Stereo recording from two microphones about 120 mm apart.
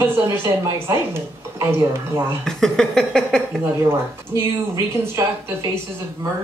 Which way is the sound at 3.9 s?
25° right (ahead or behind).